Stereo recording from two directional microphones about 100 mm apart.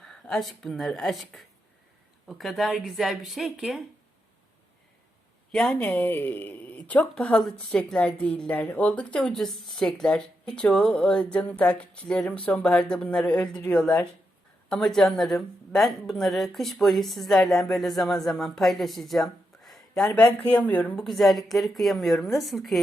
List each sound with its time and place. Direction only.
0.0 s a woman's voice: 5° left (ahead or behind)
5.5 s a woman's voice: 10° left (ahead or behind)
20.9 s a woman's voice: centre (ahead or behind)